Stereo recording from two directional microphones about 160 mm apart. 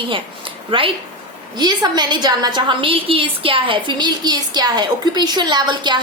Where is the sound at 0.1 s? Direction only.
30° right (ahead or behind).